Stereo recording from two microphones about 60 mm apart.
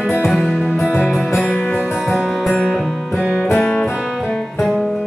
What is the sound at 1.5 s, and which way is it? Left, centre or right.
Music, left.